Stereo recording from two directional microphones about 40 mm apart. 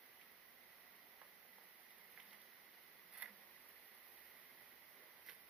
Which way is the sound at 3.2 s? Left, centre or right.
Right.